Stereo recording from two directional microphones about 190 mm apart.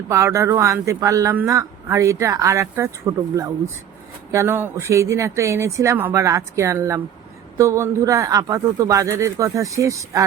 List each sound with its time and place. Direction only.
0.1 s speech: 15° right (ahead or behind)